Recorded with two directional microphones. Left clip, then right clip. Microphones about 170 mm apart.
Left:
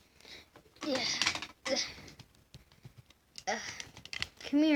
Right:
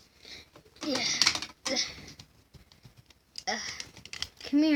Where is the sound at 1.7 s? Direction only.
10° right (ahead or behind).